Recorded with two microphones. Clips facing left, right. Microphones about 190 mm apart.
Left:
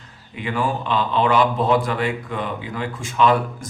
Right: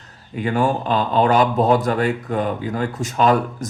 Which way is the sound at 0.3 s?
40° right (ahead or behind).